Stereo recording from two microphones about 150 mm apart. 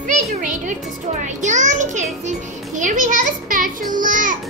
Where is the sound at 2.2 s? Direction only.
60° right (ahead or behind).